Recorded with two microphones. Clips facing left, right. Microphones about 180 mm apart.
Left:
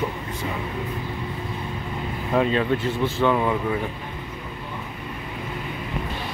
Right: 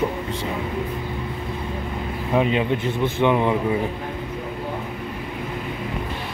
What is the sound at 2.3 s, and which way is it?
Speech, 15° right (ahead or behind).